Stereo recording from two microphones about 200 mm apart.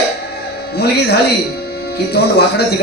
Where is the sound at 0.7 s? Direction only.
55° left (ahead or behind).